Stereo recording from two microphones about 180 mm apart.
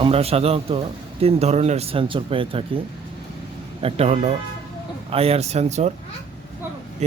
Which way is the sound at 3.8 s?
35° right (ahead or behind).